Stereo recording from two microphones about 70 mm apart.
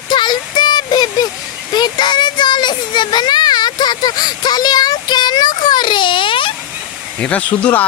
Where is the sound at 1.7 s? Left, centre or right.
Left.